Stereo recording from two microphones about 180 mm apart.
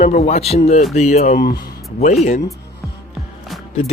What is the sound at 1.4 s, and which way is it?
Speech, 60° left (ahead or behind).